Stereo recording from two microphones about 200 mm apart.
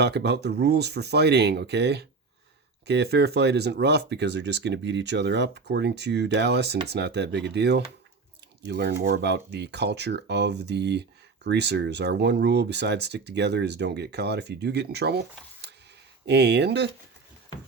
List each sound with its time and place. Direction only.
0.0 s speech: 55° right (ahead or behind)
16.2 s speech: 55° right (ahead or behind)